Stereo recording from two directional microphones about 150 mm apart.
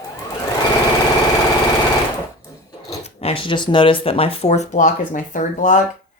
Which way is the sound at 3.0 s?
45° left (ahead or behind).